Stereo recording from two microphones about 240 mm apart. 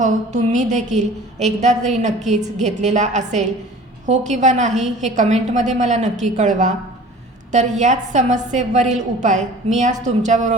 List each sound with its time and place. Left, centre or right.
0.0 s a woman's voice: right
7.8 s a woman's voice: right